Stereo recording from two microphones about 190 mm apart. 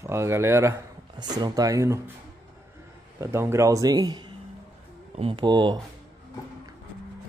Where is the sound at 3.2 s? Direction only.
15° right (ahead or behind).